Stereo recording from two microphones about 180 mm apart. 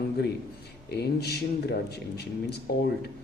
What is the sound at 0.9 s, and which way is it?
Speech, 65° left (ahead or behind).